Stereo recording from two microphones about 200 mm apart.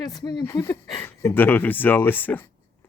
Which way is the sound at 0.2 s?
20° left (ahead or behind).